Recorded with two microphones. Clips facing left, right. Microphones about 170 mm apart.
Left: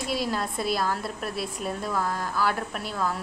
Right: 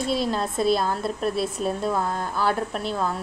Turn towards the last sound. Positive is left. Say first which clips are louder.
# right 3 dB
turn(degrees=-25)  # may be behind; listen again after turning